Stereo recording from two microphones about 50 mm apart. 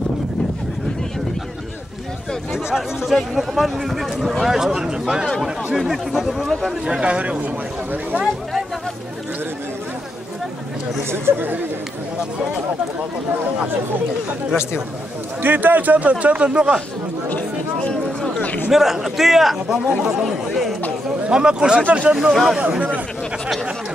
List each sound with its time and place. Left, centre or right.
2.5 s speech: centre
6.9 s a man's voice: right
11.1 s speech: right
15.4 s a man's voice: right
18.7 s speech: centre
21.3 s a man's voice: centre
22.3 s speech: centre
22.6 s a man's voice: right